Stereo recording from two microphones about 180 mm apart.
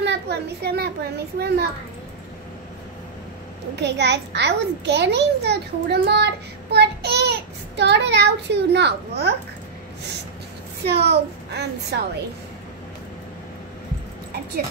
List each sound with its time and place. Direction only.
0.0 s a child's voice: 70° right (ahead or behind)
3.7 s a child's voice: 70° right (ahead or behind)
10.8 s a woman's voice: 65° right (ahead or behind)